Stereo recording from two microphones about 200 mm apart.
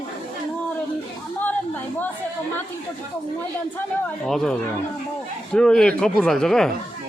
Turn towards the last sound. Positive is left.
turn(degrees=5)  # may be behind; listen again after turning